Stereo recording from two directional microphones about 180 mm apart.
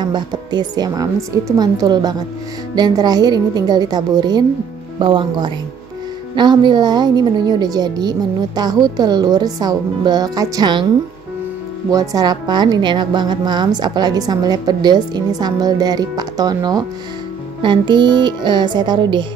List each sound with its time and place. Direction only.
0.0 s a woman's voice: 25° right (ahead or behind)
11.9 s a woman's voice: 20° right (ahead or behind)